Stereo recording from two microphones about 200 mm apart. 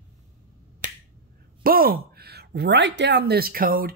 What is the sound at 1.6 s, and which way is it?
Speech, 45° right (ahead or behind).